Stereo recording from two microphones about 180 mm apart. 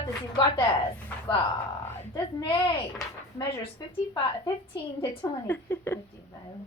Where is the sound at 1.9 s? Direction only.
15° left (ahead or behind).